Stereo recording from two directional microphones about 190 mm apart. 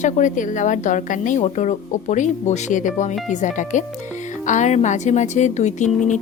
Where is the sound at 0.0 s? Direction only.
40° left (ahead or behind).